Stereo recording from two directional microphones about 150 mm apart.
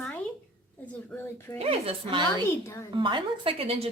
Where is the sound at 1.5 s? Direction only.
40° right (ahead or behind).